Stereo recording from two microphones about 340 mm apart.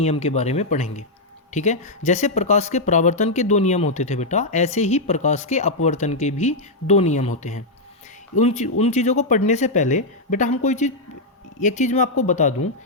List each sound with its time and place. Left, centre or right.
0.0 s speech: centre